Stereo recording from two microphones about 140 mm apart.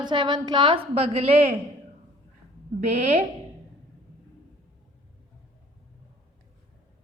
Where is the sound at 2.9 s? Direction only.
50° right (ahead or behind).